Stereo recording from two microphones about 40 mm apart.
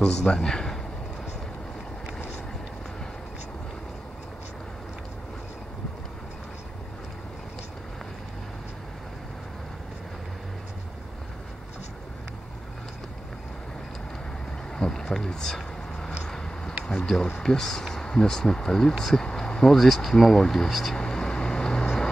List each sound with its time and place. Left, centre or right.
0.0 s speech: centre
14.8 s a sound: centre
17.4 s speech: centre
20.6 s speech: centre
20.9 s vehicle: centre